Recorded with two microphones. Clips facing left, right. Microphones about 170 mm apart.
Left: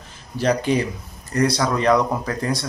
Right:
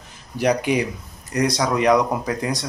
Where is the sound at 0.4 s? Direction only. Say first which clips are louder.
Even; 15° right (ahead or behind).